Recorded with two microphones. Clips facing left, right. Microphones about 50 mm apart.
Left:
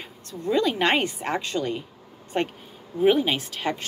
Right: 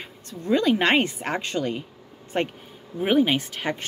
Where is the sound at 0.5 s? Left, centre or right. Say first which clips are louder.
Right 2 dB; right.